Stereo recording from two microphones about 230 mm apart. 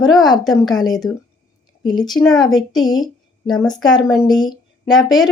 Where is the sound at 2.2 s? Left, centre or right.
Centre.